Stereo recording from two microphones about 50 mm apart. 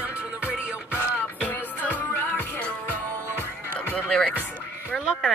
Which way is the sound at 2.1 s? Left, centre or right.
Left.